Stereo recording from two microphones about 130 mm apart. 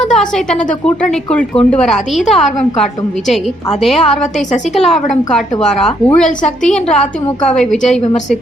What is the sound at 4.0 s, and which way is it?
Speech, 65° left (ahead or behind).